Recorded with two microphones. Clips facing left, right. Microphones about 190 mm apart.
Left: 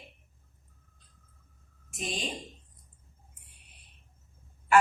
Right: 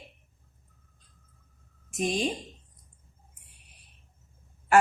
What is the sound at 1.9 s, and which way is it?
Speech, 45° right (ahead or behind).